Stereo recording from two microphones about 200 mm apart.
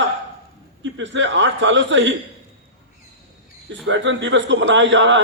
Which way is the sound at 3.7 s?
65° right (ahead or behind).